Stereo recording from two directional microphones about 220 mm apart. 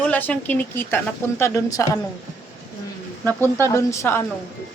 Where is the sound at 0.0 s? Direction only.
5° left (ahead or behind).